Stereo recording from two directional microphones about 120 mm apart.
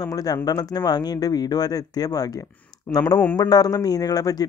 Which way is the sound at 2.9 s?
10° left (ahead or behind).